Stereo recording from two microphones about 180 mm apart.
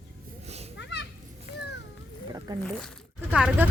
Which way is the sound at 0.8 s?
70° left (ahead or behind).